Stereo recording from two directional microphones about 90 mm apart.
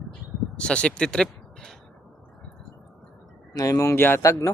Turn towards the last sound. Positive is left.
turn(degrees=35)  # may be behind; listen again after turning